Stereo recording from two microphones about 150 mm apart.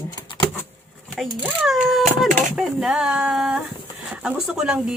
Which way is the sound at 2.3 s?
60° right (ahead or behind).